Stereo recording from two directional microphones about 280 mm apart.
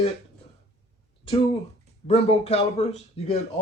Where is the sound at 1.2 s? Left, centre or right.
Centre.